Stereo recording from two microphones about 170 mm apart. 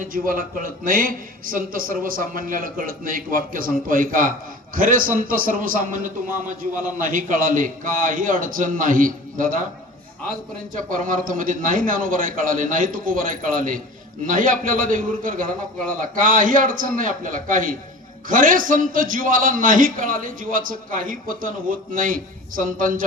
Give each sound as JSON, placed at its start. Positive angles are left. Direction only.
{"t": 0.0, "sound": "a man's voice", "side_deg": -55}
{"t": 10.8, "sound": "a man's voice", "side_deg": -50}